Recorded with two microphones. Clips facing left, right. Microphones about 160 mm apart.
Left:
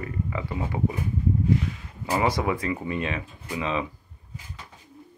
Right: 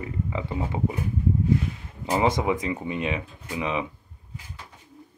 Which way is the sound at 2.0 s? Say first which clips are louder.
Right 2 dB; 20° right (ahead or behind).